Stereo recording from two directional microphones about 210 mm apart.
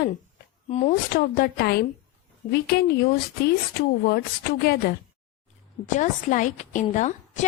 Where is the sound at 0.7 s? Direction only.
35° left (ahead or behind).